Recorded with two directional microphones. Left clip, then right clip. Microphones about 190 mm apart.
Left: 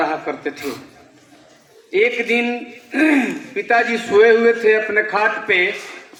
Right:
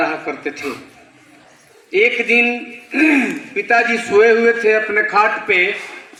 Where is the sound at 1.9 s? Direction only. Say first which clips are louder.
Right 3 dB; 45° right (ahead or behind).